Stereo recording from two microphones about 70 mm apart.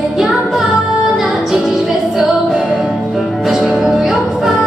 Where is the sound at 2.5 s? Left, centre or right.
Centre.